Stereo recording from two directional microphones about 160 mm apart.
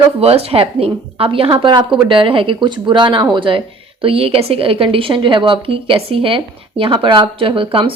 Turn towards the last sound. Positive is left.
turn(degrees=-35)  # may be behind; listen again after turning